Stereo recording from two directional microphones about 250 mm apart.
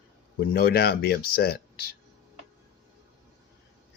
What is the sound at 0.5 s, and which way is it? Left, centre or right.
Speech, left.